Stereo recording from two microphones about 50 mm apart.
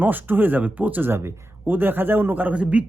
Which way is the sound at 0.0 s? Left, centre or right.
Right.